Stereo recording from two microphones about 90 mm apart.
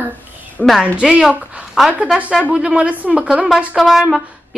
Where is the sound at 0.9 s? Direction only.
10° right (ahead or behind).